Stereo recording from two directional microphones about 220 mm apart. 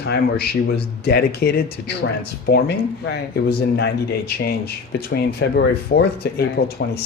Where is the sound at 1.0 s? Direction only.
45° left (ahead or behind).